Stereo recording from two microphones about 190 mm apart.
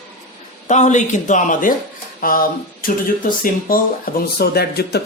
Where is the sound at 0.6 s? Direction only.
40° left (ahead or behind).